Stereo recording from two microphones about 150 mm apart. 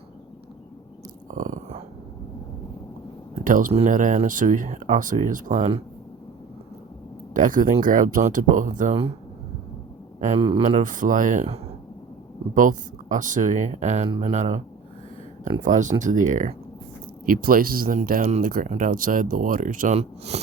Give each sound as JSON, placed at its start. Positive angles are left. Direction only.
{"t": 1.3, "sound": "a sound", "side_deg": -60}
{"t": 3.4, "sound": "speech", "side_deg": -65}
{"t": 7.3, "sound": "speech", "side_deg": -60}
{"t": 10.2, "sound": "a man's voice", "side_deg": -55}
{"t": 12.5, "sound": "speech", "side_deg": -60}
{"t": 15.6, "sound": "speech", "side_deg": -55}
{"t": 17.2, "sound": "speech", "side_deg": -70}
{"t": 20.0, "sound": "speech", "side_deg": -45}